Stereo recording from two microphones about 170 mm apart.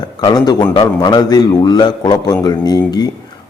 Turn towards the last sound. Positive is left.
turn(degrees=25)  # may be behind; listen again after turning